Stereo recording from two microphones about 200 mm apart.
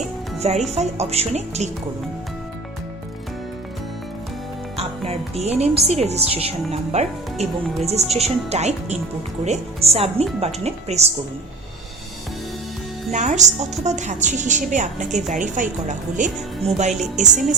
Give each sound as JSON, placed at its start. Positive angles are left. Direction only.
{"t": 0.3, "sound": "a woman's voice", "side_deg": -30}
{"t": 4.8, "sound": "a woman's voice", "side_deg": -30}
{"t": 13.1, "sound": "a woman's voice", "side_deg": -35}